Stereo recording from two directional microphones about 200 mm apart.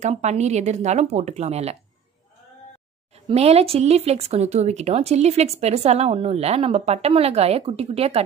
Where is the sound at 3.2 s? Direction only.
30° right (ahead or behind).